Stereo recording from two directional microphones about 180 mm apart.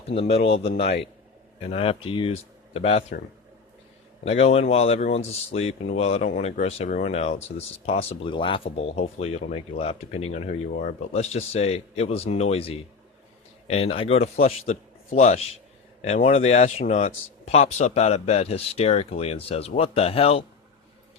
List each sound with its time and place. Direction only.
0.1 s speech: 35° left (ahead or behind)
1.7 s speech: 30° left (ahead or behind)
4.2 s speech: 35° left (ahead or behind)
10.7 s speech: 50° left (ahead or behind)
11.1 s speech: 35° left (ahead or behind)